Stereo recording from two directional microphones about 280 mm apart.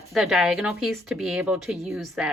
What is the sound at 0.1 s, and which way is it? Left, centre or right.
A woman's voice, centre.